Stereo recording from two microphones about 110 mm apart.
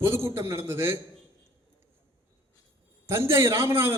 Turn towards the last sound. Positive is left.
turn(degrees=-20)  # may be behind; listen again after turning